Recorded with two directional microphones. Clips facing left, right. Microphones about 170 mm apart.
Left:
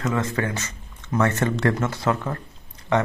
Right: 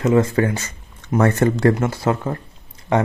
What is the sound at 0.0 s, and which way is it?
Speech, 30° right (ahead or behind).